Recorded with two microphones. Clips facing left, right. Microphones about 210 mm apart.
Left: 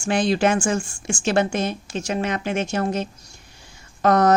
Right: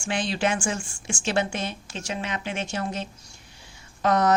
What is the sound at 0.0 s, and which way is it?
Speech, 40° left (ahead or behind).